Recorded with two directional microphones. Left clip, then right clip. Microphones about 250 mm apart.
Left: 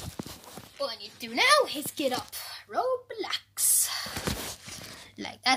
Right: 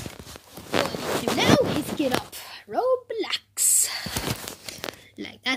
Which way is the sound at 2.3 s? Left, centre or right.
Right.